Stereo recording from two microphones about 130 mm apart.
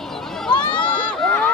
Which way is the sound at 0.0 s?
Centre (ahead or behind).